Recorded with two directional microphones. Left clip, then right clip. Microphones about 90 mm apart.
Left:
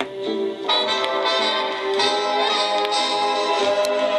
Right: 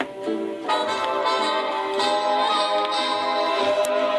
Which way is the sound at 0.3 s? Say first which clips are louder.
Left 3 dB; 30° left (ahead or behind).